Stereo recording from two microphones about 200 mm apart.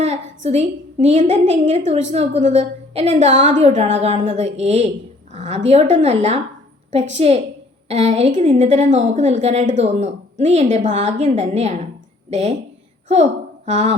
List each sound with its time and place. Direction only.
0.0 s a woman's voice: 35° right (ahead or behind)
13.7 s a woman's voice: 35° right (ahead or behind)